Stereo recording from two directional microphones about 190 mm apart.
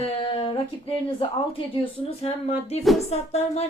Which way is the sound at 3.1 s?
35° left (ahead or behind).